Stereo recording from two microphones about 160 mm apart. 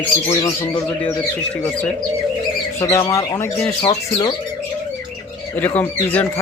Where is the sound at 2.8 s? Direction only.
20° left (ahead or behind).